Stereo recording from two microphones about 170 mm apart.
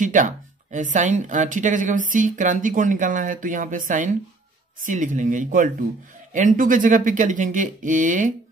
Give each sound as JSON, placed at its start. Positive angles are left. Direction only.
{"t": 0.0, "sound": "speech", "side_deg": -50}